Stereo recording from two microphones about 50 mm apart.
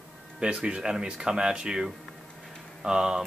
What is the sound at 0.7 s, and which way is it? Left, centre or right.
Speech, centre.